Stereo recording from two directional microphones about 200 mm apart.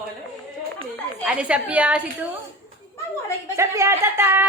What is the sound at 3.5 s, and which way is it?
Speech, 15° right (ahead or behind).